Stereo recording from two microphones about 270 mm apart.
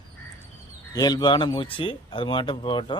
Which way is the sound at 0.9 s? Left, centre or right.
Centre.